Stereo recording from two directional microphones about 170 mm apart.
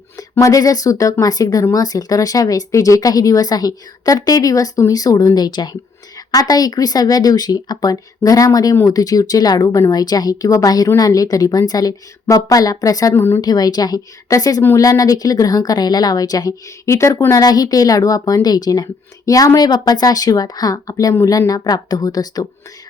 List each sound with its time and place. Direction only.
0.2 s speech: 20° left (ahead or behind)